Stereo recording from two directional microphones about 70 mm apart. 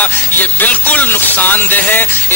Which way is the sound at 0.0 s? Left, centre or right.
Left.